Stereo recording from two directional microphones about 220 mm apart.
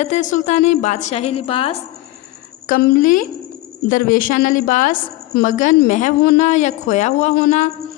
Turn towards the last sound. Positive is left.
turn(degrees=35)  # may be behind; listen again after turning